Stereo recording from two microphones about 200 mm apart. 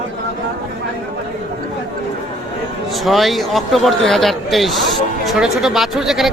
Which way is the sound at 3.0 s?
Centre (ahead or behind).